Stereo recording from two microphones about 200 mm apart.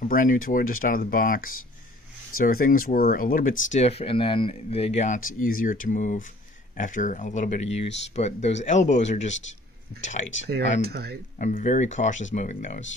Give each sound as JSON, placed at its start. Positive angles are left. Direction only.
{"t": 0.1, "sound": "speech", "side_deg": 45}
{"t": 10.5, "sound": "speech", "side_deg": -50}
{"t": 11.3, "sound": "speech", "side_deg": 40}